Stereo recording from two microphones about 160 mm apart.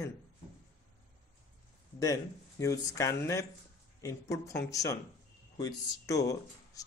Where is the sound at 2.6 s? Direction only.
20° left (ahead or behind).